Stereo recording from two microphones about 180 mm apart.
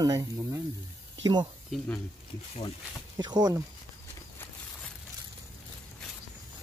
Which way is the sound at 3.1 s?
20° right (ahead or behind).